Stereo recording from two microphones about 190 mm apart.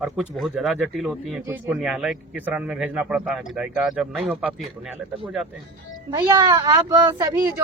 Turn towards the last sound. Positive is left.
turn(degrees=-15)  # may be behind; listen again after turning